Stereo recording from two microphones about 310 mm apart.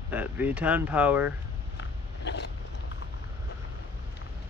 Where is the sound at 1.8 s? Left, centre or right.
Left.